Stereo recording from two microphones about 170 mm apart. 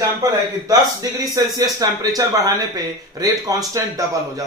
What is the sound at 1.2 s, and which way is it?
Speech, 20° right (ahead or behind).